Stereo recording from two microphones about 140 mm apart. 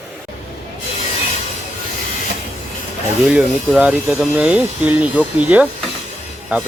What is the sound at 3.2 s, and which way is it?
Speech, 5° right (ahead or behind).